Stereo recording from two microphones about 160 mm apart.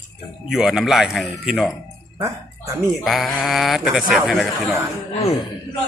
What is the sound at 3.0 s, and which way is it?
A man's voice, centre (ahead or behind).